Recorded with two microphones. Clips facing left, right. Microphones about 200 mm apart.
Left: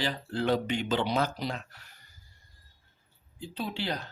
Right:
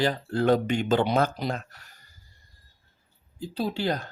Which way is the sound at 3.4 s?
40° right (ahead or behind).